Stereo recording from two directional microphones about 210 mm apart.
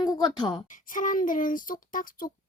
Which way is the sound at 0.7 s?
40° left (ahead or behind).